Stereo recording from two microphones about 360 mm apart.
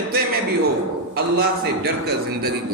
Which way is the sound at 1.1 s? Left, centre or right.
Right.